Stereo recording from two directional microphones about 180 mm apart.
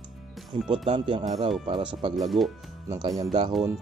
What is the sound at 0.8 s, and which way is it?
Speech, 30° right (ahead or behind).